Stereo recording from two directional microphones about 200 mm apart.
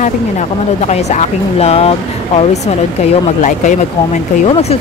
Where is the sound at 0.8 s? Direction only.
35° left (ahead or behind).